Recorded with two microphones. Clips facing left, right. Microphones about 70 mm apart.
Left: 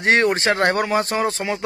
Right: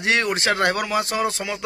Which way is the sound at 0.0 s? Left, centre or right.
Left.